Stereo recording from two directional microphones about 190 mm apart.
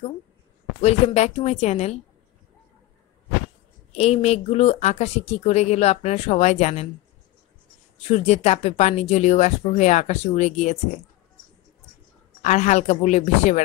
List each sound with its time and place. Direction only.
0.7 s speech: 35° left (ahead or behind)
3.9 s speech: 35° left (ahead or behind)
8.1 s speech: 35° left (ahead or behind)
12.4 s speech: 40° left (ahead or behind)